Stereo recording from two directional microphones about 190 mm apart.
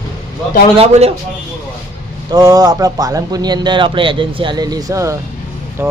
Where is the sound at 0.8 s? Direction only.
35° right (ahead or behind).